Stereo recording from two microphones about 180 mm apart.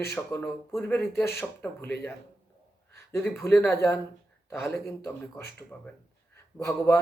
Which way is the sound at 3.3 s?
10° left (ahead or behind).